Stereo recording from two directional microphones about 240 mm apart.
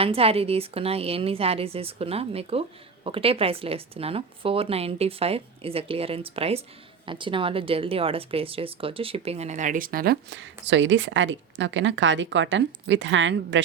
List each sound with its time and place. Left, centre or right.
0.0 s a woman's voice: right